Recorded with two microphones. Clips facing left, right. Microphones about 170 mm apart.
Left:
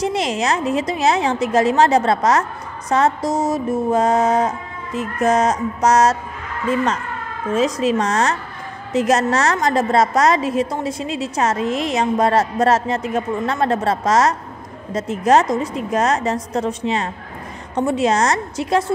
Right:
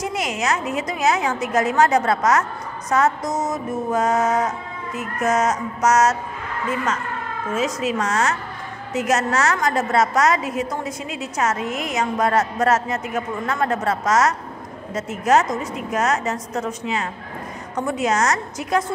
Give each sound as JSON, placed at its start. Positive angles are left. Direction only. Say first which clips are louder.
{"t": 0.0, "sound": "a woman's voice", "louder": "left 4 dB", "side_deg": 30}
{"t": 2.9, "sound": "music", "louder": "left 3 dB", "side_deg": 30}
{"t": 7.5, "sound": "a woman's voice", "louder": "left 5 dB", "side_deg": 35}
{"t": 17.7, "sound": "music", "louder": "left 4 dB", "side_deg": 30}